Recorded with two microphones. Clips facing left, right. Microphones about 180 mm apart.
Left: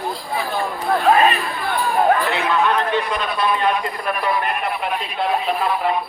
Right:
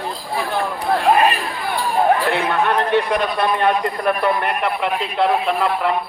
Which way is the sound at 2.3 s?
60° right (ahead or behind).